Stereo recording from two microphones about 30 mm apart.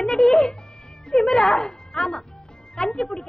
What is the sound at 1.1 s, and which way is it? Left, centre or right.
A child's voice, centre.